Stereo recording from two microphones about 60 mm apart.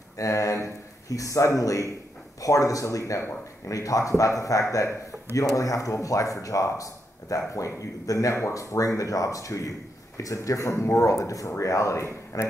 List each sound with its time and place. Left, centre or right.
0.2 s speech: left